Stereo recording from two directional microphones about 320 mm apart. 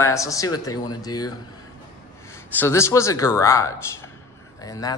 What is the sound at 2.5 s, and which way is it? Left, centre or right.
Speech, centre.